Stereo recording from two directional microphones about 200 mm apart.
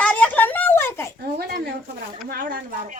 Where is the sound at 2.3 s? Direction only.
45° right (ahead or behind).